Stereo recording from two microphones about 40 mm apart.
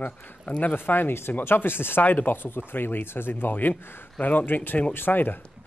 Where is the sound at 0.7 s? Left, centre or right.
Left.